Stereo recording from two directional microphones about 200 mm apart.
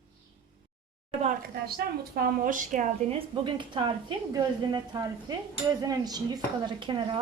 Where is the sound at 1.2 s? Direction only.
45° right (ahead or behind).